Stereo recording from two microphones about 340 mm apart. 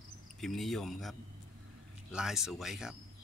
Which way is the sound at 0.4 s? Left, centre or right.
Centre.